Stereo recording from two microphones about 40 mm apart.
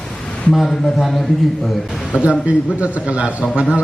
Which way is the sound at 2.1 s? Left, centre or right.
Right.